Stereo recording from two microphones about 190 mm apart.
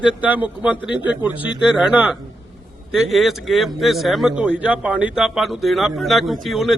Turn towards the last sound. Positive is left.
turn(degrees=0)  # may be behind; listen again after turning